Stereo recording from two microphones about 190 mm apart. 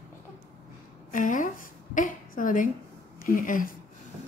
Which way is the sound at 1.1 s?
45° left (ahead or behind).